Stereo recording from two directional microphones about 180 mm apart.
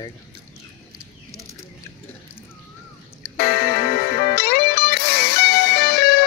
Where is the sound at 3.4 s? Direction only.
60° left (ahead or behind).